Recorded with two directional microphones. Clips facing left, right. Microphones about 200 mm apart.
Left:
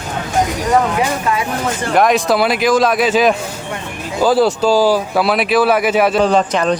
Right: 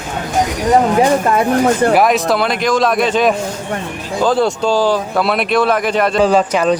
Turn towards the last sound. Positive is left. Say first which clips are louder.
# right 1 dB
turn(degrees=-5)  # may be behind; listen again after turning